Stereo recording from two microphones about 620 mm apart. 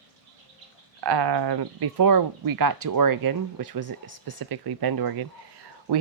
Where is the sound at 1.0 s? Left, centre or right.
Right.